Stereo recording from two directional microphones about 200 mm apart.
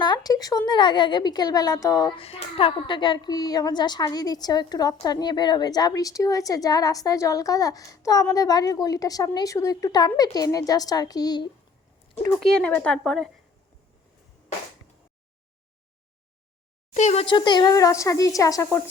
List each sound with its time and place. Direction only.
0.0 s speech: 20° left (ahead or behind)
2.2 s speech: 30° left (ahead or behind)
12.4 s a woman's voice: 5° left (ahead or behind)
16.9 s a child's voice: 35° left (ahead or behind); by 18.8 s 15° left (ahead or behind)